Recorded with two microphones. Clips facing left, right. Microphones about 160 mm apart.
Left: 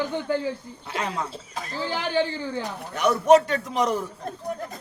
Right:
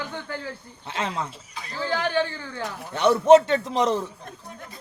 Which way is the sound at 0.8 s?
25° right (ahead or behind).